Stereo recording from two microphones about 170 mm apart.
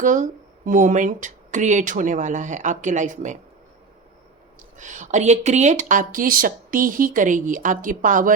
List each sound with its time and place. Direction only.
0.0 s speech: 50° right (ahead or behind)
4.8 s speech: 45° right (ahead or behind)